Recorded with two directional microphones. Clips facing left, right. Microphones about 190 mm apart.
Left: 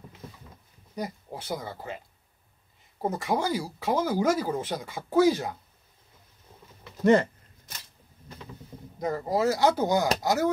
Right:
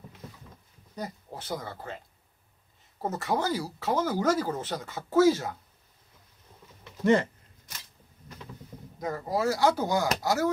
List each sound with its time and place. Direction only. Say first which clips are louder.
0.9 s speech: left 3 dB; 10° left (ahead or behind)
3.0 s speech: left 2 dB; 15° left (ahead or behind)
9.0 s speech: left 3 dB; 20° left (ahead or behind)